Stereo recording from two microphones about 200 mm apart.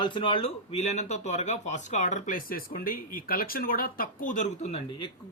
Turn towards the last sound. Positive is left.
turn(degrees=25)  # may be behind; listen again after turning